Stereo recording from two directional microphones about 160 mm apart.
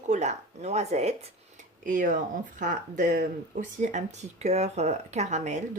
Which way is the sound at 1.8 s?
55° right (ahead or behind).